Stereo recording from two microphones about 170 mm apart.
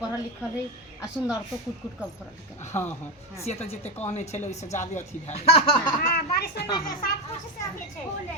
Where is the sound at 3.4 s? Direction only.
40° left (ahead or behind).